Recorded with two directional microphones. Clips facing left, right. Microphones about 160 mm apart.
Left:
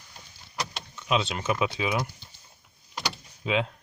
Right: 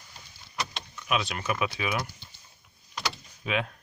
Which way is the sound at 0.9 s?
25° left (ahead or behind).